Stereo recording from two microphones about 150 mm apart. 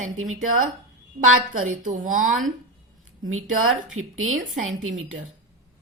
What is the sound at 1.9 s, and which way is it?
Speech, 60° right (ahead or behind).